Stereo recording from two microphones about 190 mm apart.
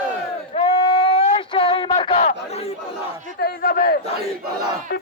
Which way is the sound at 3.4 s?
50° left (ahead or behind).